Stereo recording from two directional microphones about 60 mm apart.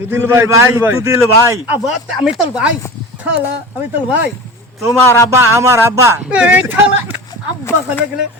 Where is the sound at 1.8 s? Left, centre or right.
Centre.